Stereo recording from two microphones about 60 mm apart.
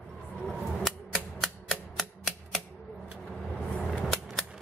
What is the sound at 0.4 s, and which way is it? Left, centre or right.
Scissors, centre.